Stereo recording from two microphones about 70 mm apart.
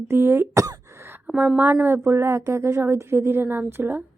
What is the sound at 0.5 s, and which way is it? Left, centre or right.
Throat clearing, right.